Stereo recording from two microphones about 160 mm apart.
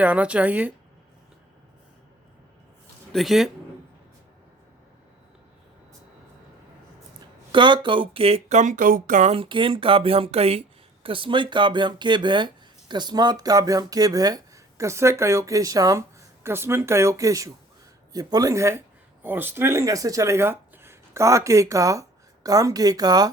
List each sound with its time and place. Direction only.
0.0 s a woman's voice: 10° right (ahead or behind)
3.1 s speech: centre (ahead or behind)
7.5 s speech: 30° right (ahead or behind); by 9.3 s 55° right (ahead or behind)
9.3 s speech: 35° right (ahead or behind)